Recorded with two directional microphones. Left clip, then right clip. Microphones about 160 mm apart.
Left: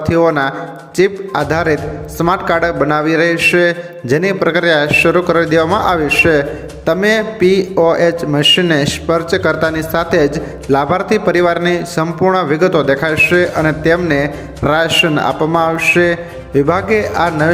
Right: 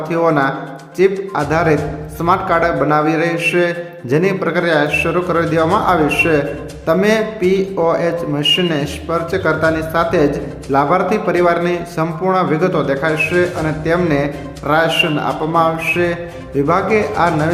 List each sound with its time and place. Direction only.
0.0 s speech: 30° left (ahead or behind)